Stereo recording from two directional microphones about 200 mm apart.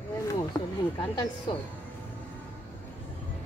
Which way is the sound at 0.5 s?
20° left (ahead or behind).